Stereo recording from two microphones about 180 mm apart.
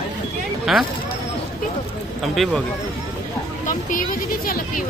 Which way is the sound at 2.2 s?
Centre (ahead or behind).